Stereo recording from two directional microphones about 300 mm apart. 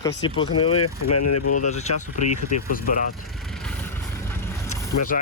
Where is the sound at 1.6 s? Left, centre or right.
Left.